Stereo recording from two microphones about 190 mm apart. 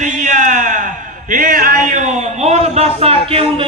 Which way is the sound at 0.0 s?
40° right (ahead or behind).